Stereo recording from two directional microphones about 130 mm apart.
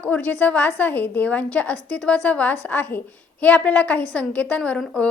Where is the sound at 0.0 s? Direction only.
10° left (ahead or behind).